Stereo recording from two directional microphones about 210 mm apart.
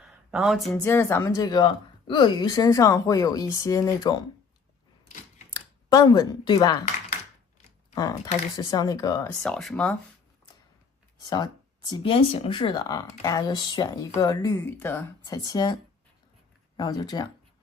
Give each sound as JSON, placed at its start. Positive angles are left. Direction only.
{"t": 0.3, "sound": "speech", "side_deg": 0}
{"t": 0.9, "sound": "speech", "side_deg": 10}
{"t": 5.5, "sound": "speech", "side_deg": 15}
{"t": 7.9, "sound": "speech", "side_deg": 15}
{"t": 9.4, "sound": "speech", "side_deg": 0}
{"t": 11.9, "sound": "speech", "side_deg": 25}